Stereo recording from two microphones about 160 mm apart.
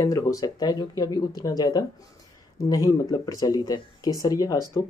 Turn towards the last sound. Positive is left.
turn(degrees=25)  # may be behind; listen again after turning